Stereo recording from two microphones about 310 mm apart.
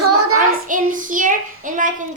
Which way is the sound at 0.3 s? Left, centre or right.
Right.